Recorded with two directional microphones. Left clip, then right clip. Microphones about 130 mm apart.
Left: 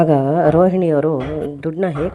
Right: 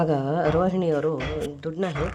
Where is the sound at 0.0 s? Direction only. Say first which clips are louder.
Left 9 dB; 35° left (ahead or behind).